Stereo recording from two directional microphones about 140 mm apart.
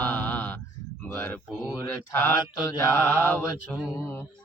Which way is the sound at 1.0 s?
15° left (ahead or behind).